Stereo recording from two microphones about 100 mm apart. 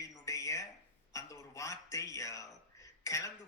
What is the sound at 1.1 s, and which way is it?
A man's voice, 35° left (ahead or behind).